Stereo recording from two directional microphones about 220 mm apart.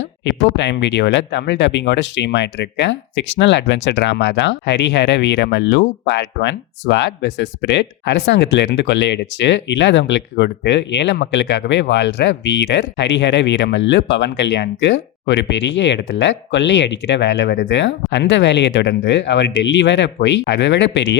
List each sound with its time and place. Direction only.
0.3 s speech: 50° left (ahead or behind)